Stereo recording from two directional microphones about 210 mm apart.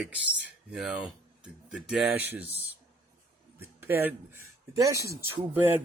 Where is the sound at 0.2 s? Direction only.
55° left (ahead or behind).